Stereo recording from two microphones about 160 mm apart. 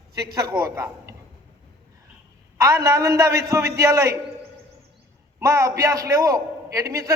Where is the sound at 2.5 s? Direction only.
20° right (ahead or behind).